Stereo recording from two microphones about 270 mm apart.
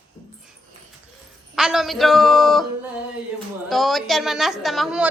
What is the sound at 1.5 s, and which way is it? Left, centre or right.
A woman's voice, centre.